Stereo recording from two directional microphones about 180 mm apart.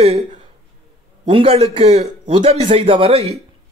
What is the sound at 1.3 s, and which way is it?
A man's voice, 30° right (ahead or behind).